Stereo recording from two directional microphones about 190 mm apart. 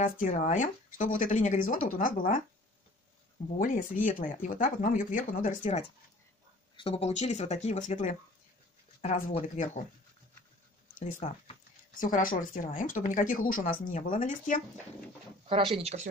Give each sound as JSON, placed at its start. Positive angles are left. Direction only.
{"t": 0.0, "sound": "speech", "side_deg": 40}
{"t": 3.5, "sound": "speech", "side_deg": 45}
{"t": 11.0, "sound": "speech", "side_deg": 40}
{"t": 15.4, "sound": "speech", "side_deg": -30}